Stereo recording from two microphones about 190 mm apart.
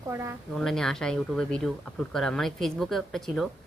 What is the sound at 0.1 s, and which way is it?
Speech, 15° right (ahead or behind).